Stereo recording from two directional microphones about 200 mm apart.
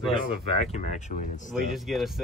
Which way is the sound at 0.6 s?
35° left (ahead or behind).